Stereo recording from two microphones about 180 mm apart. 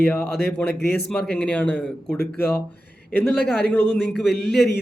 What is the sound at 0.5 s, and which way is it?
A man's voice, 10° left (ahead or behind).